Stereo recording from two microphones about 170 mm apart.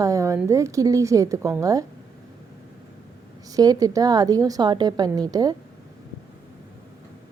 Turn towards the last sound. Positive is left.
turn(degrees=-20)  # may be behind; listen again after turning